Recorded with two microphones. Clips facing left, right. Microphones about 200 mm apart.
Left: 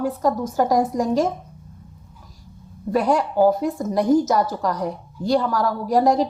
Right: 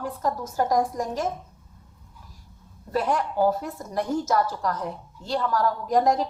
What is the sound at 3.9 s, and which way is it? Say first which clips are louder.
Speech: left 6 dB; 15° left (ahead or behind).